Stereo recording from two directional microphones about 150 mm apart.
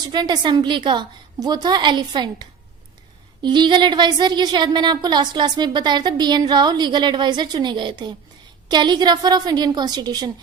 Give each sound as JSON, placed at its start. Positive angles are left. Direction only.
{"t": 0.0, "sound": "a woman's voice", "side_deg": -30}